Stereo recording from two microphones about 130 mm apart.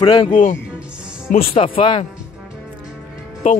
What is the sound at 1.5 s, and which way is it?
Speech, 45° left (ahead or behind).